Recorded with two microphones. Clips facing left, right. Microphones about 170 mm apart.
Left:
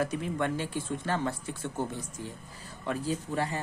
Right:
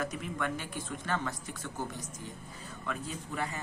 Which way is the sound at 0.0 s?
25° left (ahead or behind).